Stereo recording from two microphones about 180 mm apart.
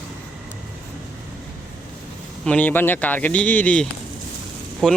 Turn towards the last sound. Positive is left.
turn(degrees=0)  # may be behind; listen again after turning